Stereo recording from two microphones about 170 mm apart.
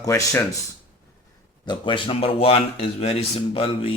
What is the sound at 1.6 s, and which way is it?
Speech, 30° left (ahead or behind).